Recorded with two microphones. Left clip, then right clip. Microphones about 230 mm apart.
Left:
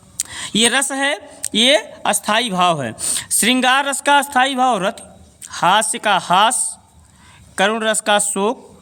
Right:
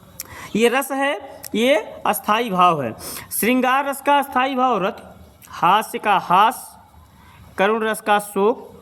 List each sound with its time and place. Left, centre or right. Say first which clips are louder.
0.2 s speech: left 1 dB; left
4.3 s a man's voice: left 3 dB; left
5.8 s speech: left 2 dB; left
7.5 s a man's voice: left 2 dB; left